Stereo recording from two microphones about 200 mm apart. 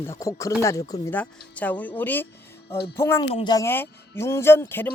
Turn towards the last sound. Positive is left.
turn(degrees=10)  # may be behind; listen again after turning